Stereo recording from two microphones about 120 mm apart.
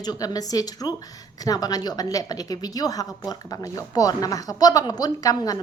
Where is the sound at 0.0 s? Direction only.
35° left (ahead or behind).